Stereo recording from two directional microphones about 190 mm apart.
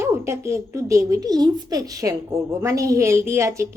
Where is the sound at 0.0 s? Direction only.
15° right (ahead or behind).